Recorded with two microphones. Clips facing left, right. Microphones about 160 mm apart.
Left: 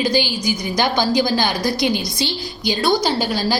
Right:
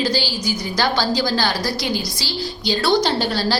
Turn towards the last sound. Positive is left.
turn(degrees=15)  # may be behind; listen again after turning